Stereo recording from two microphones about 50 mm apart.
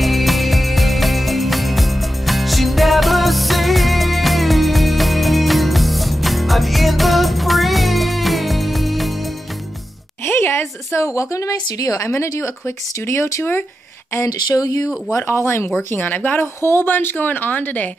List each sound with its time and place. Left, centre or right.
0.0 s music: centre
10.2 s a sound: left
10.9 s a woman's voice: left
12.0 s speech: left
15.1 s speech: left
15.9 s speech: left